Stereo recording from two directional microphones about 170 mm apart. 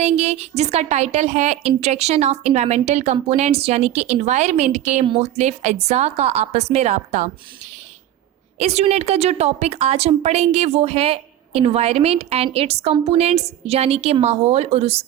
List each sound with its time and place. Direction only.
0.0 s a woman's voice: 40° right (ahead or behind)
8.5 s a woman's voice: 40° right (ahead or behind)